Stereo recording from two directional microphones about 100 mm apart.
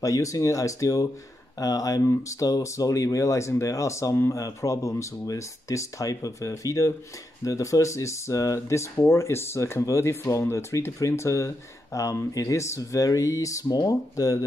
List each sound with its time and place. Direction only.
0.0 s speech: 35° left (ahead or behind)